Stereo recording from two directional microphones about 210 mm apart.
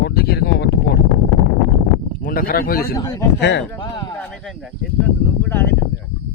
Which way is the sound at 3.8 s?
20° left (ahead or behind).